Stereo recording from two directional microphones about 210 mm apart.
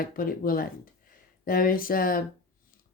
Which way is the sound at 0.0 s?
45° left (ahead or behind).